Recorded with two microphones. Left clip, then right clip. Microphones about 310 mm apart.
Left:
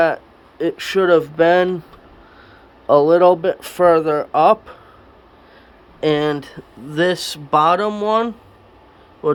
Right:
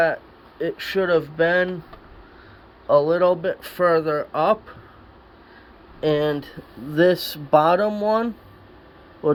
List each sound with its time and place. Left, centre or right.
0.6 s speech: centre
2.8 s speech: centre
6.0 s a man's voice: centre